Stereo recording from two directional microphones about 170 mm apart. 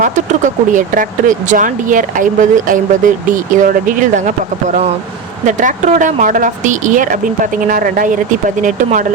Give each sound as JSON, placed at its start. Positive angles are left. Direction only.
{"t": 0.0, "sound": "speech", "side_deg": -50}